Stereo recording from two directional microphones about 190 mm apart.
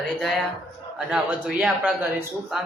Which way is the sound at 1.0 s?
5° right (ahead or behind).